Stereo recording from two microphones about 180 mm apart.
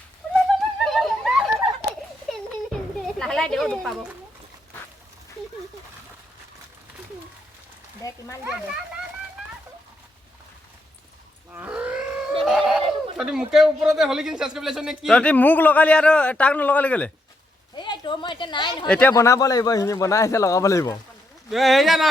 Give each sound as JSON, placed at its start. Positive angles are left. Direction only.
{"t": 0.9, "sound": "a sound", "side_deg": 0}
{"t": 3.2, "sound": "speech", "side_deg": 5}
{"t": 8.0, "sound": "speech", "side_deg": 20}
{"t": 8.4, "sound": "speech", "side_deg": -5}
{"t": 11.5, "sound": "a sound", "side_deg": -5}
{"t": 12.5, "sound": "speech", "side_deg": -5}
{"t": 17.7, "sound": "a woman's voice", "side_deg": 25}
{"t": 18.9, "sound": "a man's voice", "side_deg": 5}
{"t": 19.1, "sound": "a man's voice", "side_deg": 15}
{"t": 21.5, "sound": "speech", "side_deg": 0}